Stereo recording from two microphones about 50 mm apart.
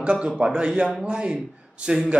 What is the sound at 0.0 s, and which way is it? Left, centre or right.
A man's voice, right.